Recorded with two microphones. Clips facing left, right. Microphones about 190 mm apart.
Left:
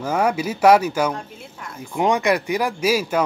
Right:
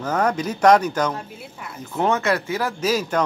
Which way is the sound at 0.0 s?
10° left (ahead or behind).